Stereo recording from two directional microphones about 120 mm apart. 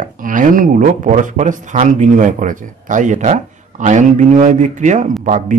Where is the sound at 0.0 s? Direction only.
90° right.